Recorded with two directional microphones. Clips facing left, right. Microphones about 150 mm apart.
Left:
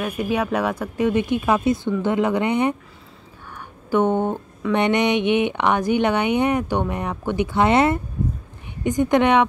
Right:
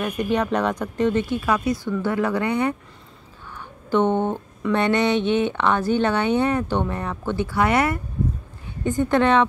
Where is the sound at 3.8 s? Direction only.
10° left (ahead or behind).